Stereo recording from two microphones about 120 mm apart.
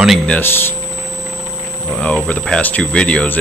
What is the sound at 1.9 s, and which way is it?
Speech, 10° left (ahead or behind).